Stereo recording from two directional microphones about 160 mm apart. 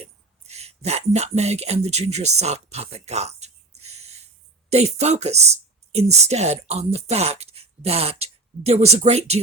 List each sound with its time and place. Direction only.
0.0 s speech: 40° right (ahead or behind)
3.8 s a sound: 45° right (ahead or behind)
4.7 s speech: 45° right (ahead or behind)